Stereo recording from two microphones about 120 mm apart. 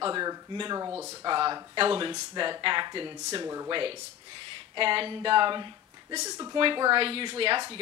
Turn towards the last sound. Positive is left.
turn(degrees=-45)  # may be behind; listen again after turning